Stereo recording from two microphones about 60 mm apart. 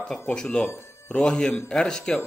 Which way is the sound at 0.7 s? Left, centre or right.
Left.